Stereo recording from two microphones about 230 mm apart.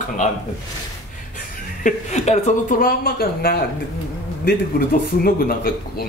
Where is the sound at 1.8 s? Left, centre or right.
Left.